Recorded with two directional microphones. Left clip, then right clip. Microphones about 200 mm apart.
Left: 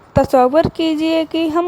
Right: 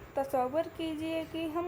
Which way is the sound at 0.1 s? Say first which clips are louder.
Left 19 dB; 40° left (ahead or behind).